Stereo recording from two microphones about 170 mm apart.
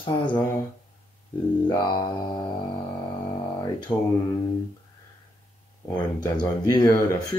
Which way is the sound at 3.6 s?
25° left (ahead or behind).